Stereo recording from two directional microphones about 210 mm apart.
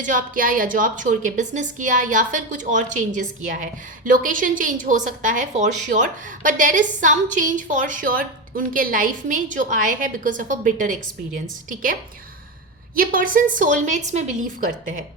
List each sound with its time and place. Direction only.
0.0 s a woman's voice: 40° right (ahead or behind)
13.0 s a woman's voice: 40° right (ahead or behind)